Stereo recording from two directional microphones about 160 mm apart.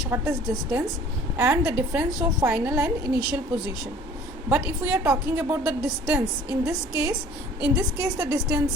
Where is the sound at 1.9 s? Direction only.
15° right (ahead or behind).